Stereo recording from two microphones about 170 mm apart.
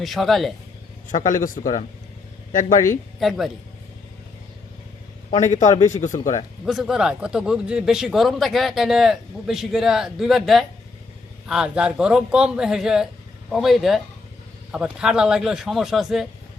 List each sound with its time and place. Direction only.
0.0 s speech: centre (ahead or behind)
1.0 s speech: 50° left (ahead or behind)
3.2 s speech: centre (ahead or behind)
5.4 s speech: 45° left (ahead or behind)
6.7 s speech: centre (ahead or behind)